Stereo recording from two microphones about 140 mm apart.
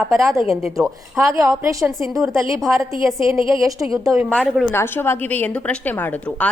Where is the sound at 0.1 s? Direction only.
20° right (ahead or behind).